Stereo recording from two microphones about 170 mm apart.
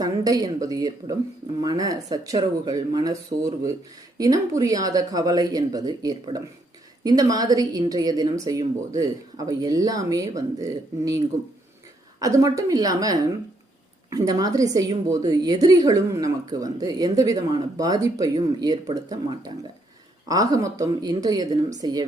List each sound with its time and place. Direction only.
0.0 s a woman's voice: 20° right (ahead or behind)
12.2 s a woman's voice: 20° right (ahead or behind)